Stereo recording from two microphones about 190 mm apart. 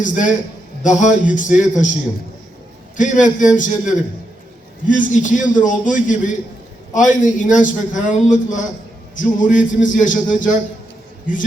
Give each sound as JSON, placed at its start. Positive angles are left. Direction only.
{"t": 0.0, "sound": "a man's voice", "side_deg": 40}
{"t": 3.0, "sound": "a man's voice", "side_deg": 40}